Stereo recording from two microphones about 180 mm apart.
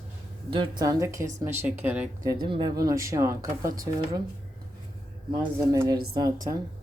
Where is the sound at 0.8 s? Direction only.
20° right (ahead or behind).